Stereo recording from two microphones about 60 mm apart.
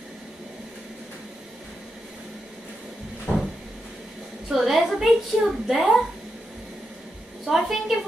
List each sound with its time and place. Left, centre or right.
3.3 s cupboard open or close: left
4.5 s a woman's voice: centre
7.4 s a woman's voice: centre